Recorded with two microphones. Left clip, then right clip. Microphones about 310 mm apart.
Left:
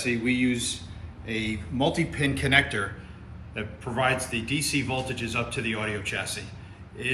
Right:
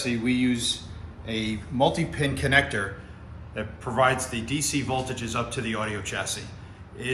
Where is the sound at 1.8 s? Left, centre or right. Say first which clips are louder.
Right 2 dB; centre.